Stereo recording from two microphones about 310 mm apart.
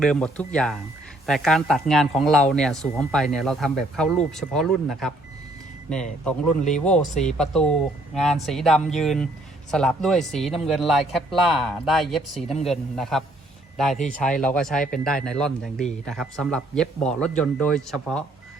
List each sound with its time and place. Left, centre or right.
0.0 s a man's voice: centre
7.1 s speech: left
7.3 s a man's voice: centre